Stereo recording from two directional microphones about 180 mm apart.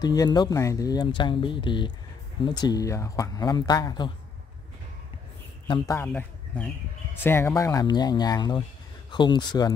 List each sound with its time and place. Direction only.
0.0 s speech: 20° left (ahead or behind)
5.7 s speech: 15° left (ahead or behind)